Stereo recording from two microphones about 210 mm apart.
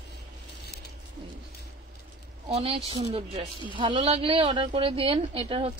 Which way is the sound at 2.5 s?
25° right (ahead or behind).